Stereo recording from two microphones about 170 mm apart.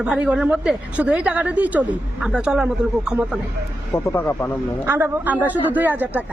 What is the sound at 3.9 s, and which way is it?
Speech, 15° left (ahead or behind).